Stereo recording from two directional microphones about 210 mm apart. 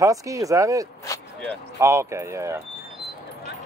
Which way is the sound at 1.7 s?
15° right (ahead or behind).